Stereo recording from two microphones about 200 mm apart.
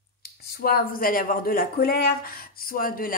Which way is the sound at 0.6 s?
45° left (ahead or behind).